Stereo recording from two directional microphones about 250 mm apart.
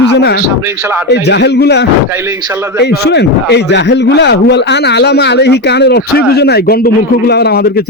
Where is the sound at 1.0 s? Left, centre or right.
Left.